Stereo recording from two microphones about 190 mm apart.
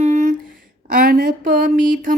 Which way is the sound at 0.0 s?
40° right (ahead or behind).